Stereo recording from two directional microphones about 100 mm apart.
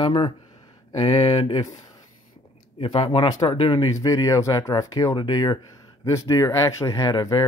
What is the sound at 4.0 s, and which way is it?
Speech, 35° left (ahead or behind).